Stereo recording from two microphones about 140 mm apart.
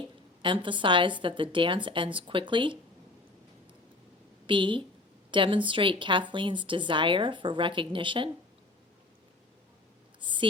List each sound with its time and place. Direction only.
0.4 s a woman's voice: 35° right (ahead or behind)
4.4 s a woman's voice: 35° right (ahead or behind)
10.2 s a sound: 35° right (ahead or behind)